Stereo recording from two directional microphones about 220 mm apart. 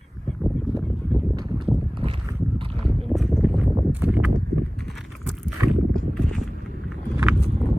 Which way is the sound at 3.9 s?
10° right (ahead or behind).